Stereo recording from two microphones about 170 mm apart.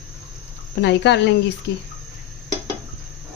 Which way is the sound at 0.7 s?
90° left.